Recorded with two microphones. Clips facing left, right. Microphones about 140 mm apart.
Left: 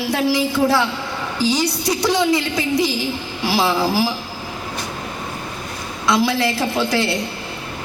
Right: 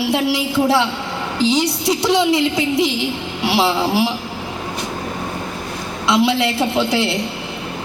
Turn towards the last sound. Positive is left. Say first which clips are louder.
# right 2 dB
turn(degrees=-20)  # may be behind; listen again after turning